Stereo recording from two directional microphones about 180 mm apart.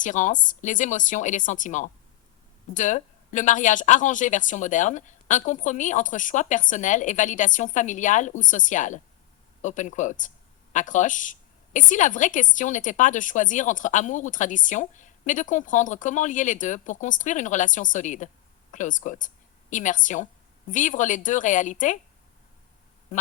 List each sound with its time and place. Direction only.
0.0 s speech: 45° left (ahead or behind)